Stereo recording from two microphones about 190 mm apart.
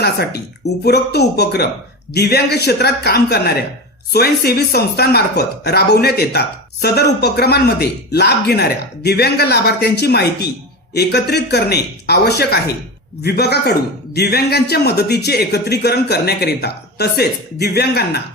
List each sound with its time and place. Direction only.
0.0 s a man's voice: 55° left (ahead or behind)